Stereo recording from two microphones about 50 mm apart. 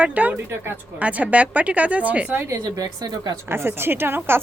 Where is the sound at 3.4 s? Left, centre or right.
Right.